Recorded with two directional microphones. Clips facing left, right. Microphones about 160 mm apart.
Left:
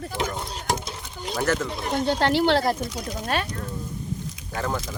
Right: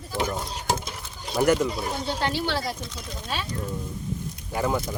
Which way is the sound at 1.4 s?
15° right (ahead or behind).